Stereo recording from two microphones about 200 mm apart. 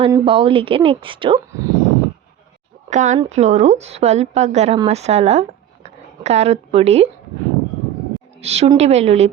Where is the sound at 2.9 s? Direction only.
40° right (ahead or behind).